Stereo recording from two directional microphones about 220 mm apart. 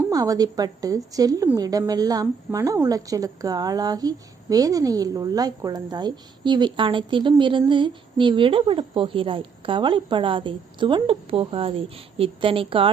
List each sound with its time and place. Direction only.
0.0 s a woman's voice: 15° right (ahead or behind)